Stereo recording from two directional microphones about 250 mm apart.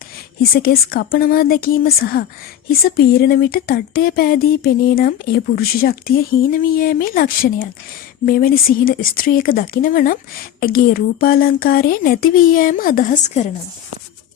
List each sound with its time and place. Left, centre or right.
0.5 s speech: left